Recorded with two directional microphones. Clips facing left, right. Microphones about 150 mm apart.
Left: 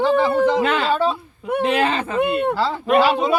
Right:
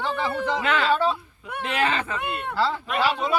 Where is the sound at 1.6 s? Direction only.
30° left (ahead or behind).